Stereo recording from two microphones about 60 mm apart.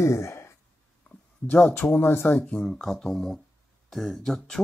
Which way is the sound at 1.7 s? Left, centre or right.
Left.